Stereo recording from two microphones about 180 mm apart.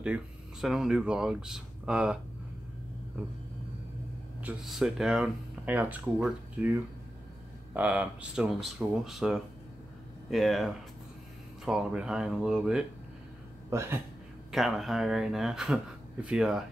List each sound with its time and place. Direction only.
0.0 s speech: 5° right (ahead or behind)
4.4 s speech: 5° right (ahead or behind)
13.7 s speech: 15° right (ahead or behind)
14.5 s speech: centre (ahead or behind)